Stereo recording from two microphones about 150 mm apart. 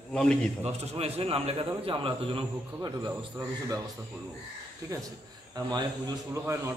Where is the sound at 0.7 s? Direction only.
45° right (ahead or behind).